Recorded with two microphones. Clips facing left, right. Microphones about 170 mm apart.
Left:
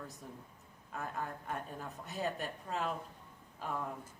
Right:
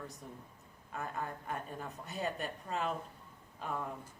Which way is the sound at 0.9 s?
Centre (ahead or behind).